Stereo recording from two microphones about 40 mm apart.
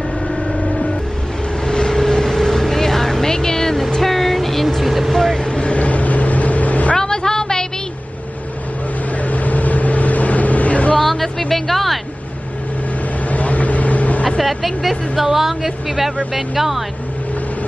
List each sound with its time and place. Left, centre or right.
1.7 s vehicle: centre
5.1 s vehicle: centre
5.5 s vehicle: left
5.8 s vehicle: left
7.0 s a sound: centre
9.3 s vehicle: left
11.0 s music: centre
13.3 s vehicle: left
14.4 s a sound: centre
16.3 s speech: centre